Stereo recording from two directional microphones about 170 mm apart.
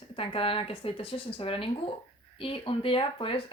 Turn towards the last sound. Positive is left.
turn(degrees=30)  # may be behind; listen again after turning